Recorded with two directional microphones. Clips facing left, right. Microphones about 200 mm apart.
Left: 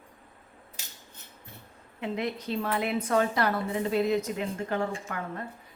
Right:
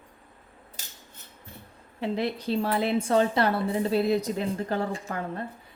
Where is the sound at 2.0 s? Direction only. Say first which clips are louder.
Right 3 dB; 30° right (ahead or behind).